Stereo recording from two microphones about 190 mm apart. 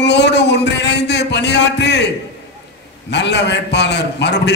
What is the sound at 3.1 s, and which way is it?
A man's voice, 65° left (ahead or behind).